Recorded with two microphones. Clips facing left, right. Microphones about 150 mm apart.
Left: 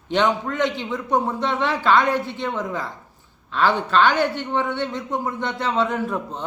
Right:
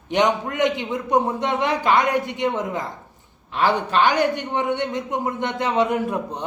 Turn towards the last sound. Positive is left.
turn(degrees=-15)  # may be behind; listen again after turning